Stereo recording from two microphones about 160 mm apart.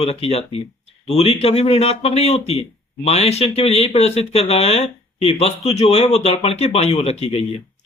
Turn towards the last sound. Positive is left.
turn(degrees=40)  # may be behind; listen again after turning